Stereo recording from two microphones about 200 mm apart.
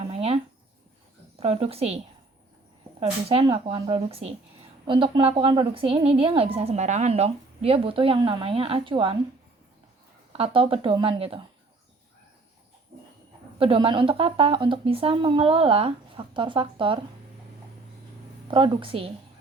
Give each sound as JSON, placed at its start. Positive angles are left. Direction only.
{"t": 0.1, "sound": "a sound", "side_deg": -30}
{"t": 1.4, "sound": "speech", "side_deg": -30}
{"t": 3.0, "sound": "a woman's voice", "side_deg": -30}
{"t": 10.3, "sound": "a woman's voice", "side_deg": -30}
{"t": 13.6, "sound": "a woman's voice", "side_deg": -25}
{"t": 18.5, "sound": "a woman's voice", "side_deg": -25}